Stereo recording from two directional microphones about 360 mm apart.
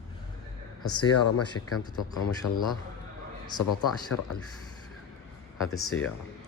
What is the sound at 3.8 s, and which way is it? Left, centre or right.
Speech, left.